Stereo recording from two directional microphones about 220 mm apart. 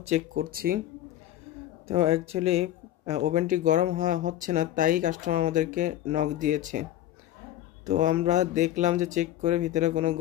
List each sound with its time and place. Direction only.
0.0 s speech: 35° right (ahead or behind)
1.9 s speech: 25° right (ahead or behind)